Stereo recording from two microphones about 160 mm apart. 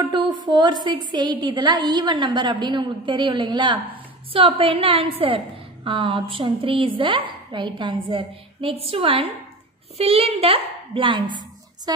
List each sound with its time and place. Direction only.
0.0 s a woman's voice: 25° right (ahead or behind)